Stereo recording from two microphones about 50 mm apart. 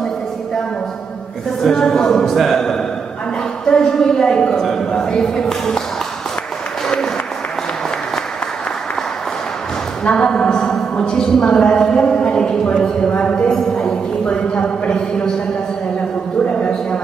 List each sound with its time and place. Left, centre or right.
1.6 s a woman's voice: centre
10.0 s a woman's voice: centre